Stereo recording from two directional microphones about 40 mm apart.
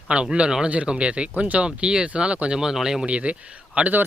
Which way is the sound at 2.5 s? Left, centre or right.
Centre.